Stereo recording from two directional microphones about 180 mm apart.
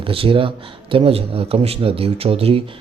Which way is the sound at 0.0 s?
30° right (ahead or behind).